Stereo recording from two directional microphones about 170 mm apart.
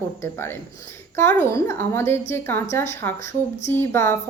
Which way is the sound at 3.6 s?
15° left (ahead or behind).